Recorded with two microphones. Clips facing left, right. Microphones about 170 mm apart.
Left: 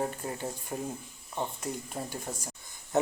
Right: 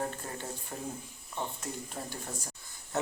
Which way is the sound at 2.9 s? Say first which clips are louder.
Left 6 dB; 20° left (ahead or behind).